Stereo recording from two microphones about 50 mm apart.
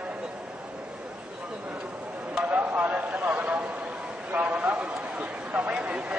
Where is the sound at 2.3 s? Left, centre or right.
Right.